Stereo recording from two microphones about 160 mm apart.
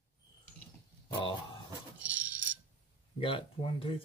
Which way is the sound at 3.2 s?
35° left (ahead or behind).